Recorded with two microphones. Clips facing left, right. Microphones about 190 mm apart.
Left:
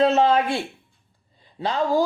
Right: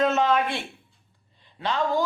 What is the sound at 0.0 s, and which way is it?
Speech, 35° left (ahead or behind).